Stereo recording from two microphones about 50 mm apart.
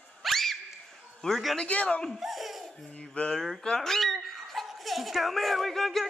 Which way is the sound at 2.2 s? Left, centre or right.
Centre.